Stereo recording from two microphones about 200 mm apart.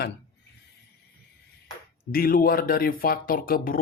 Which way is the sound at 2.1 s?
45° left (ahead or behind).